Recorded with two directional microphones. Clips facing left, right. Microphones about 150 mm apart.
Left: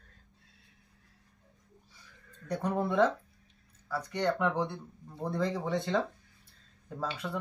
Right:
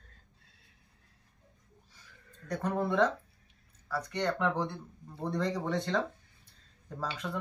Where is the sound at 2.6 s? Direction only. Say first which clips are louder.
Left 1 dB; 10° left (ahead or behind).